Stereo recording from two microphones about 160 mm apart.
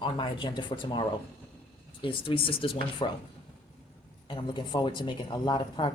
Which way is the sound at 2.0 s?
30° left (ahead or behind).